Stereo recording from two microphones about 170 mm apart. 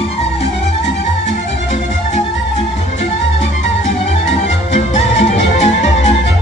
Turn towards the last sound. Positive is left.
turn(degrees=40)  # may be behind; listen again after turning